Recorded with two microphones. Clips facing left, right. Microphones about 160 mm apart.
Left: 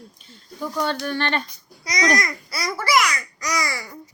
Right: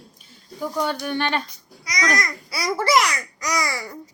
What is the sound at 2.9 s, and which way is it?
Speech, 30° right (ahead or behind).